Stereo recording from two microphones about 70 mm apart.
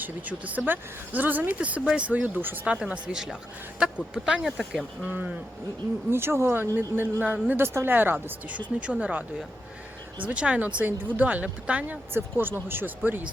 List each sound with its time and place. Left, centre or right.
0.0 s speech: right
2.6 s speech: centre
4.5 s speech: centre
5.0 s speech: right
7.6 s speech: right
8.9 s speech: centre
10.2 s speech: centre
12.1 s speech: right